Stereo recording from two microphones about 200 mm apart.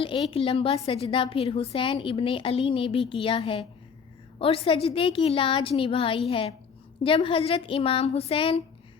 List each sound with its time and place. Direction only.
0.0 s a woman's voice: 25° left (ahead or behind)